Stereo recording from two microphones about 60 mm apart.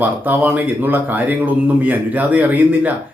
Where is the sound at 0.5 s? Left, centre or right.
Right.